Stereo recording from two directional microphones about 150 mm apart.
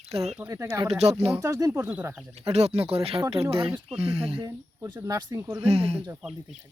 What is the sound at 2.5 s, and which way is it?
Speech, 45° right (ahead or behind).